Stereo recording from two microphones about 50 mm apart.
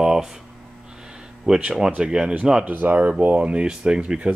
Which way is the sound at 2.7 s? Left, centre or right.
Right.